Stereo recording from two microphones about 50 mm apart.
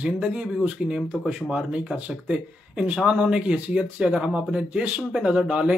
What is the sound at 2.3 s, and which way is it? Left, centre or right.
Speech, right.